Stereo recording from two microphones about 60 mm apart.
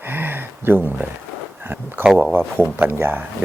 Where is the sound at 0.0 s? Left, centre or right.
Right.